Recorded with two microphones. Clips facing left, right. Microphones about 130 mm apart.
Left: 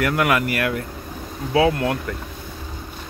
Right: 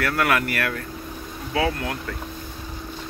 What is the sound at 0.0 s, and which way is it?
Speech, 15° left (ahead or behind).